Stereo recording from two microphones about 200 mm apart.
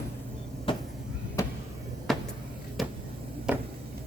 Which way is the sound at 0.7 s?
25° left (ahead or behind).